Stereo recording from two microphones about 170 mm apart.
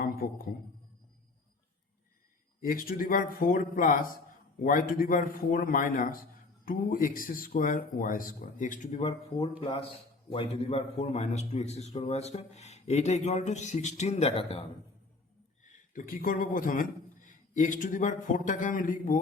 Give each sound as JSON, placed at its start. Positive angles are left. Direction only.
{"t": 0.0, "sound": "a sound", "side_deg": 60}
{"t": 2.6, "sound": "a man's voice", "side_deg": 55}
{"t": 15.6, "sound": "a man's voice", "side_deg": 50}